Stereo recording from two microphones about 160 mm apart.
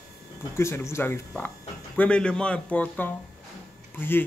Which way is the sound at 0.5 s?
15° left (ahead or behind).